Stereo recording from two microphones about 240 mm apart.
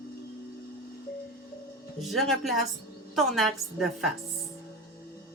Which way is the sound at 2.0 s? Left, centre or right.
Centre.